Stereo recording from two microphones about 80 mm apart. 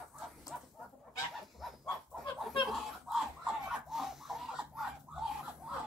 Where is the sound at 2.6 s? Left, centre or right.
Centre.